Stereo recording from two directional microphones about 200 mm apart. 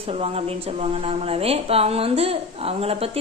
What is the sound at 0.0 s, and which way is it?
Speech, 30° right (ahead or behind).